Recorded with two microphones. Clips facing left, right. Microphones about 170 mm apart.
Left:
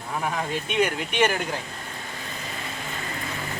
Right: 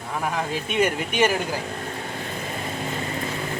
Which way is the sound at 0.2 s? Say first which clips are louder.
Right 2 dB; centre (ahead or behind).